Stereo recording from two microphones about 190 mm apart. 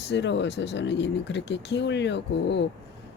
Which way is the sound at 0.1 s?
70° left (ahead or behind).